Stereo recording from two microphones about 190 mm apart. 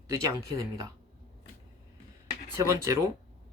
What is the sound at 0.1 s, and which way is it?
Speech, 15° right (ahead or behind).